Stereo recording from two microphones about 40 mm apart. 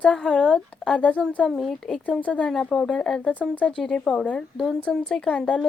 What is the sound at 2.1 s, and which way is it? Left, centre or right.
Speech, left.